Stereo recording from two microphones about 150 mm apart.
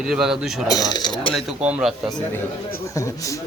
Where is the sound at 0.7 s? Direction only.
25° left (ahead or behind).